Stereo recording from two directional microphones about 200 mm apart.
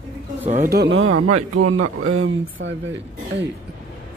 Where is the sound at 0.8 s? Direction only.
80° right.